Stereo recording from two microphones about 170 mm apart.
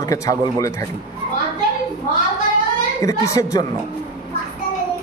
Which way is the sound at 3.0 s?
20° left (ahead or behind).